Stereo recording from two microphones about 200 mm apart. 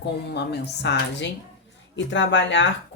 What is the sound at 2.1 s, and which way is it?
Speech, 65° left (ahead or behind).